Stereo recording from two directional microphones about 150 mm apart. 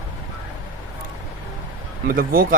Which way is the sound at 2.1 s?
75° right (ahead or behind).